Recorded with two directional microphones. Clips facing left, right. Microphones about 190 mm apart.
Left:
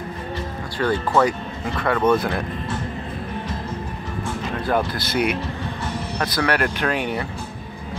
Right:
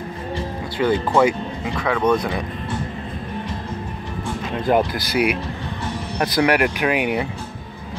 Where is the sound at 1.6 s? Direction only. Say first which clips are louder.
Even; centre (ahead or behind).